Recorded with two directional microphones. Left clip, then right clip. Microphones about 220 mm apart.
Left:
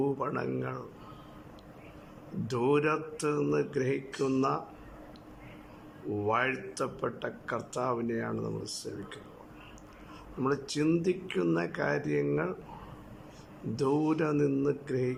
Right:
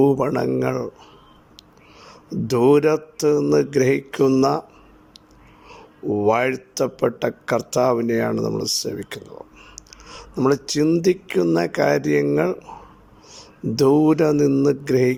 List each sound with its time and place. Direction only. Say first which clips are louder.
0.0 s speech: right 14 dB; 30° right (ahead or behind)
2.5 s speech: right 12 dB; 30° right (ahead or behind)
6.1 s speech: right 11 dB; 30° right (ahead or behind)
13.7 s speech: right 13 dB; 30° right (ahead or behind)